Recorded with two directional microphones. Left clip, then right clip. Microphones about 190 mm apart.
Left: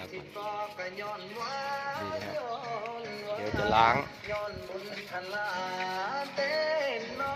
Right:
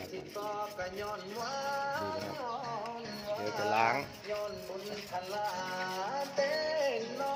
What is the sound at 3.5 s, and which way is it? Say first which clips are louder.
Speech: left 6 dB; 15° left (ahead or behind).